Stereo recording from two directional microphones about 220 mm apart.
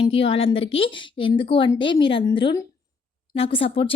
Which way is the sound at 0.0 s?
25° left (ahead or behind).